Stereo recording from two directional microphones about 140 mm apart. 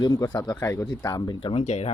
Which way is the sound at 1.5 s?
50° left (ahead or behind).